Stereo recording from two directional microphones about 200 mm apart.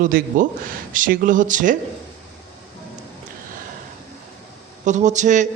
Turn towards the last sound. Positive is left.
turn(degrees=-40)  # may be behind; listen again after turning